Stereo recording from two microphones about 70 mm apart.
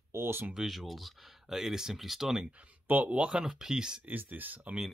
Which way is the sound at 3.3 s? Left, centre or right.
Centre.